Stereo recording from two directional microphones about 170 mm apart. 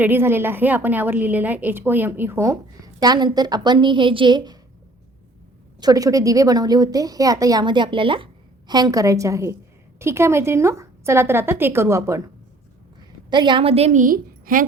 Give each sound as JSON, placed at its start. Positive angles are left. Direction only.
{"t": 0.0, "sound": "a woman's voice", "side_deg": -10}
{"t": 5.8, "sound": "a woman's voice", "side_deg": -20}
{"t": 13.3, "sound": "a woman's voice", "side_deg": -25}